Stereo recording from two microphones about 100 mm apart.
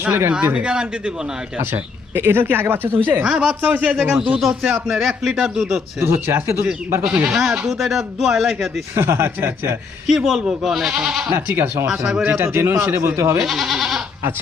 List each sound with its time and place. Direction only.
0.0 s speech: 20° right (ahead or behind)
1.7 s speech: 20° right (ahead or behind)
3.2 s speech: 10° right (ahead or behind)
4.4 s speech: 5° right (ahead or behind)
6.0 s speech: 20° right (ahead or behind)
7.3 s speech: centre (ahead or behind)
9.0 s speech: 25° right (ahead or behind)
10.1 s speech: 5° right (ahead or behind)
11.3 s speech: 20° right (ahead or behind)
11.9 s speech: 5° right (ahead or behind)
12.2 s speech: 20° right (ahead or behind)
13.4 s goat: centre (ahead or behind)